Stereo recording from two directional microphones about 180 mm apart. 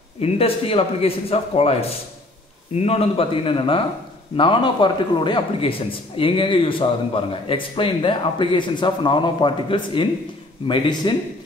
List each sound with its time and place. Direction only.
0.2 s a man's voice: 30° left (ahead or behind)